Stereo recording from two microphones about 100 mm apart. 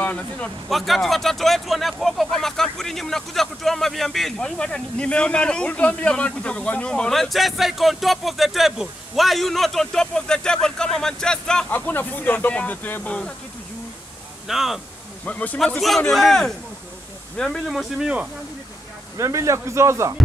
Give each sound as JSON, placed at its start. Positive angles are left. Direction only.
{"t": 0.0, "sound": "speech", "side_deg": 15}
{"t": 0.7, "sound": "speech", "side_deg": 0}
{"t": 11.7, "sound": "speech", "side_deg": 20}
{"t": 14.5, "sound": "speech", "side_deg": -5}
{"t": 15.2, "sound": "speech", "side_deg": 15}
{"t": 15.6, "sound": "speech", "side_deg": 0}
{"t": 19.1, "sound": "speech", "side_deg": -30}